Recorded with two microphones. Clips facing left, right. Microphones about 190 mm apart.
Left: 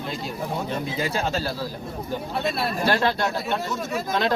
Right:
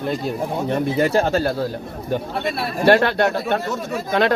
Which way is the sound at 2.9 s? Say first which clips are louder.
Right 9 dB; 65° right (ahead or behind).